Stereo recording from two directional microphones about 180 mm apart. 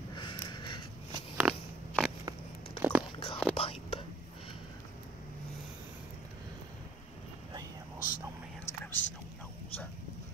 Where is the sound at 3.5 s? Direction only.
30° left (ahead or behind).